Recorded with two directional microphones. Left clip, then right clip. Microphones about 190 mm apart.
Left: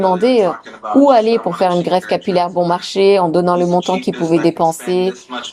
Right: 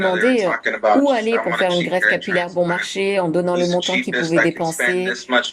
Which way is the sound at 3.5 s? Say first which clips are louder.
Left 4 dB; 25° left (ahead or behind).